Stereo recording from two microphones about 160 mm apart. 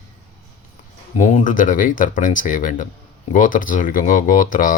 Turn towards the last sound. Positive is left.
turn(degrees=55)  # may be behind; listen again after turning